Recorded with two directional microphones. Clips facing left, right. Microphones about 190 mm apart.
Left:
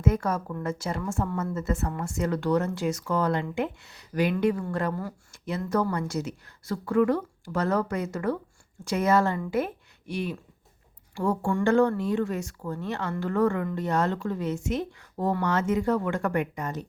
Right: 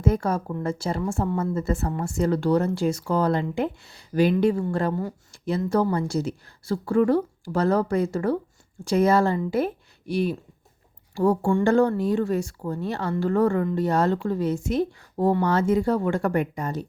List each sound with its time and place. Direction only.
0.0 s a woman's voice: 30° right (ahead or behind)